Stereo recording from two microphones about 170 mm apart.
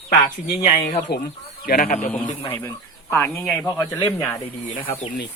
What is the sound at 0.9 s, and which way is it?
Speech, 50° left (ahead or behind).